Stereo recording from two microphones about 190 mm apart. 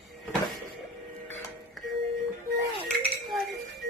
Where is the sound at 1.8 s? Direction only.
Centre (ahead or behind).